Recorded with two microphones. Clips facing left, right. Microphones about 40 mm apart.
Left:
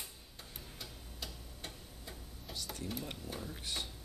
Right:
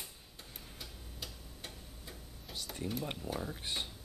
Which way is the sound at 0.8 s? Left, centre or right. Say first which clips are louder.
Even; centre.